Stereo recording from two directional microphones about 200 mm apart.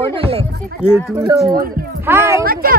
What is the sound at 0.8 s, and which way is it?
Speech, 5° right (ahead or behind).